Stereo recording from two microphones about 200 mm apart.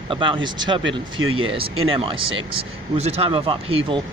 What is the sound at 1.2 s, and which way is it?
Speech, 90° right.